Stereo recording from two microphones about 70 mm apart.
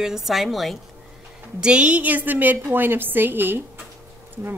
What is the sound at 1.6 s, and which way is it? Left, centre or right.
A woman's voice, centre.